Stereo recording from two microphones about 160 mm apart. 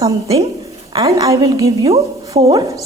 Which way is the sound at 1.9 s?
40° right (ahead or behind).